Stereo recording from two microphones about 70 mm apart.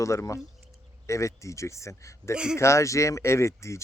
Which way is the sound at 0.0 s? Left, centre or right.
Left.